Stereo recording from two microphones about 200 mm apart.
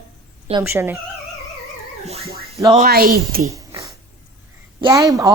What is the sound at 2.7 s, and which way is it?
Speech, 45° right (ahead or behind).